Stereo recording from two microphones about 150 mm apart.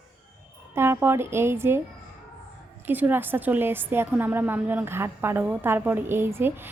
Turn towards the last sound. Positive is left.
turn(degrees=-15)  # may be behind; listen again after turning